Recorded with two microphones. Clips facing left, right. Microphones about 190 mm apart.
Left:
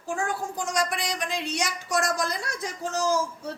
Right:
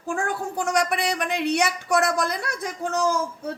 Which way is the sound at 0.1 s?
60° right (ahead or behind).